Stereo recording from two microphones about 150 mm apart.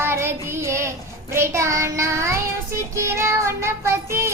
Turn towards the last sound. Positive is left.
turn(degrees=-20)  # may be behind; listen again after turning